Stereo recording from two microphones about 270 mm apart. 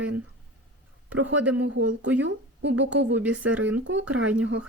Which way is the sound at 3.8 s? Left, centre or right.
Right.